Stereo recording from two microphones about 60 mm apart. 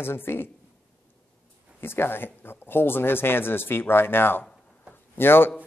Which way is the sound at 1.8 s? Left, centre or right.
Left.